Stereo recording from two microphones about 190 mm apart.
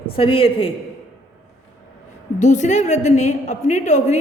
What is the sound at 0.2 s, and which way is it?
Speech, 30° left (ahead or behind).